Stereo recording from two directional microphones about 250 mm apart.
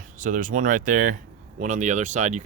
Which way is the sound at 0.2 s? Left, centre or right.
Right.